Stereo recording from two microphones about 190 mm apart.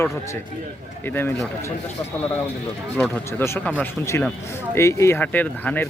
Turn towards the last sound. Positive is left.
turn(degrees=10)  # may be behind; listen again after turning